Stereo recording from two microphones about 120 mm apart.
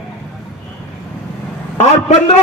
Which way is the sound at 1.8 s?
65° left (ahead or behind).